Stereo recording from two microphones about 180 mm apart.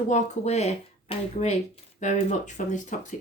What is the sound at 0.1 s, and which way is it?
Speech, 40° left (ahead or behind).